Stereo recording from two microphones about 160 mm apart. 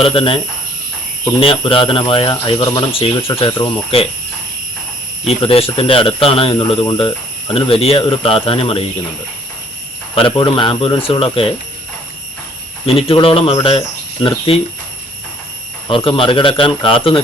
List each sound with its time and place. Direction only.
0.0 s speech: 35° left (ahead or behind)
5.3 s speech: 35° left (ahead or behind)
10.2 s speech: 30° left (ahead or behind)
12.8 s speech: 35° left (ahead or behind)
15.9 s speech: 35° left (ahead or behind)